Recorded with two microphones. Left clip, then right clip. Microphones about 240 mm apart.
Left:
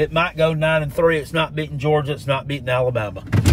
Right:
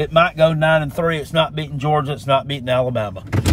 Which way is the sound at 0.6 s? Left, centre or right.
Centre.